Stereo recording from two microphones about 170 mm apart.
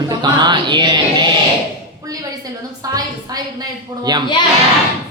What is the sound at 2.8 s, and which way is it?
A woman's voice, 20° right (ahead or behind).